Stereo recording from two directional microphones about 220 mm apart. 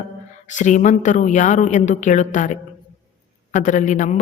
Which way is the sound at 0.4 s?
35° left (ahead or behind).